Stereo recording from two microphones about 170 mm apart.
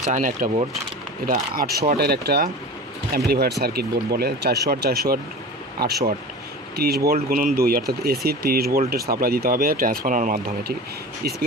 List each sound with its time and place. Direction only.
0.1 s speech: 55° right (ahead or behind)